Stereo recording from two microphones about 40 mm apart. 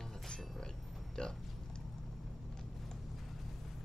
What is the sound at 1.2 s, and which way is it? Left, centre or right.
Speech, left.